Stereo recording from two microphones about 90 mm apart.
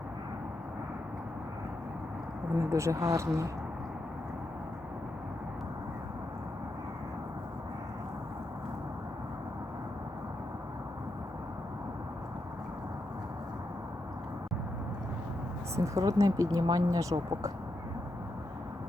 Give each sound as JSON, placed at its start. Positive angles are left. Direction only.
{"t": 2.6, "sound": "speech", "side_deg": -35}
{"t": 15.7, "sound": "speech", "side_deg": -35}